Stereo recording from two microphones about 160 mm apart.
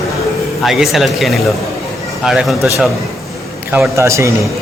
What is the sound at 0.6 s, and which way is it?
Speech, centre (ahead or behind).